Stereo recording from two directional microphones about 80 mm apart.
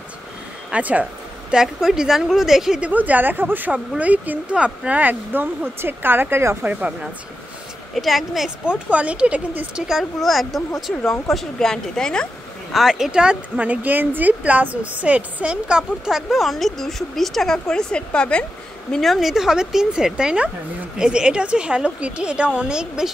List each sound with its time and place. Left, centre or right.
0.7 s speech: centre
1.5 s speech: centre
2.9 s speech: right
7.9 s speech: centre
8.6 s a woman's voice: centre
9.8 s speech: centre
12.7 s a woman's voice: centre